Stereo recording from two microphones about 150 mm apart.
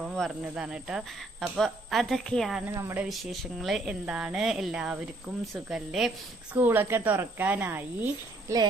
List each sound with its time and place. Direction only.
0.0 s speech: centre (ahead or behind)
2.6 s speech: 15° right (ahead or behind)
3.0 s speech: centre (ahead or behind)
6.5 s speech: 15° right (ahead or behind)